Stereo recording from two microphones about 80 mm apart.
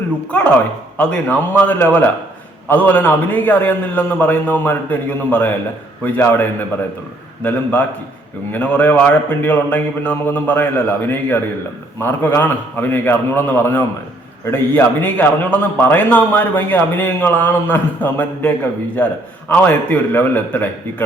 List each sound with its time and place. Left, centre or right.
0.9 s a man's voice: centre